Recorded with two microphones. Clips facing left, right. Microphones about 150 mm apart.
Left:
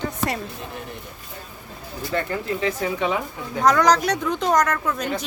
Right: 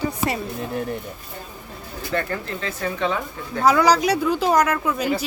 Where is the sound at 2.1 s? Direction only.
15° left (ahead or behind).